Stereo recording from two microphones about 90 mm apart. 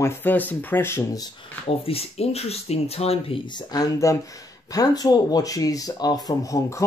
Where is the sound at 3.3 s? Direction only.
90° left.